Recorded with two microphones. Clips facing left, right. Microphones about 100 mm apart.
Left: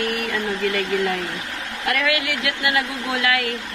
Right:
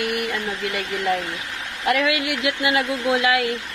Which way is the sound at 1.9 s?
20° right (ahead or behind).